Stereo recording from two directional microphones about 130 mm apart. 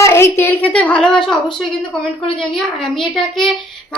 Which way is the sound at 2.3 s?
5° left (ahead or behind).